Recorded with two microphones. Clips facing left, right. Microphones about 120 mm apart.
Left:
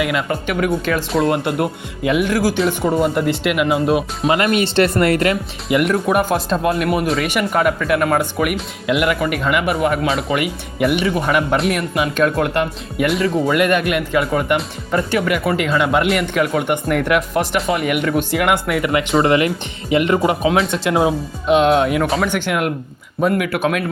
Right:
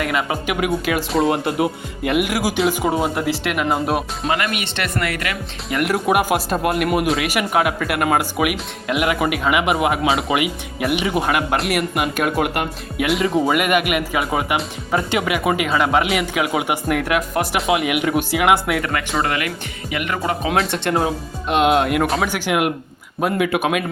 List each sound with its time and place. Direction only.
0.0 s speech: centre (ahead or behind)
1.1 s speech: centre (ahead or behind)
2.2 s speech: 10° right (ahead or behind)
4.4 s speech: 30° left (ahead or behind)
5.6 s speech: centre (ahead or behind)
7.1 s speech: centre (ahead or behind)
10.1 s speech: centre (ahead or behind)
10.9 s speech: 15° right (ahead or behind)
11.3 s speech: centre (ahead or behind)
18.8 s speech: 15° left (ahead or behind)
20.5 s speech: centre (ahead or behind); by 23.6 s 20° right (ahead or behind)